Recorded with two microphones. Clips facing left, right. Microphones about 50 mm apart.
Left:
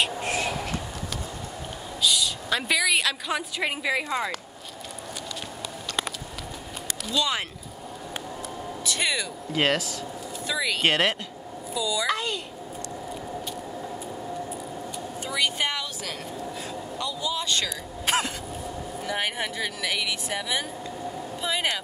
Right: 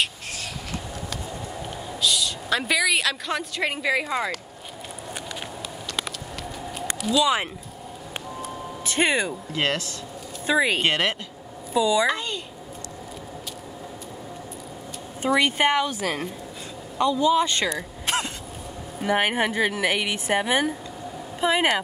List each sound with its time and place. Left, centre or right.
0.3 s a sound: left
2.0 s a woman's voice: centre
7.0 s speech: centre
8.8 s a woman's voice: right
9.5 s speech: centre
10.4 s a woman's voice: right
15.2 s a woman's voice: right
18.0 s vehicle: centre
18.9 s a woman's voice: right